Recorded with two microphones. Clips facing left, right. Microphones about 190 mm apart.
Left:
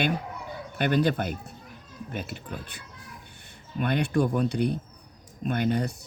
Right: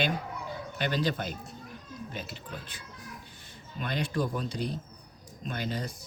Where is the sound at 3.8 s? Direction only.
60° left (ahead or behind).